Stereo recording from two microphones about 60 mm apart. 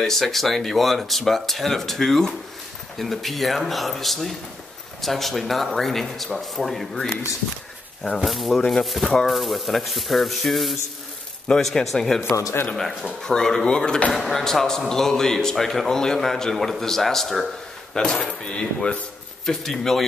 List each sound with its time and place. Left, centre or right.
0.0 s speech: centre
8.2 s speech: centre
12.2 s speech: left
13.0 s speech: centre
14.1 s speech: centre